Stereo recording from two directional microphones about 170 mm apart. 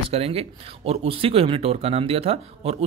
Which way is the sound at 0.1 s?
35° right (ahead or behind).